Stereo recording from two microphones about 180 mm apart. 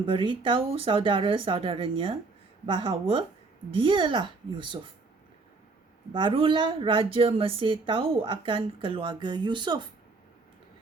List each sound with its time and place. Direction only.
0.0 s a woman's voice: 30° right (ahead or behind)
6.1 s a woman's voice: 30° right (ahead or behind)